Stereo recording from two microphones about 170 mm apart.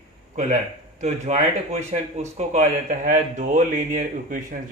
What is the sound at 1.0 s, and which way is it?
Speech, 40° right (ahead or behind).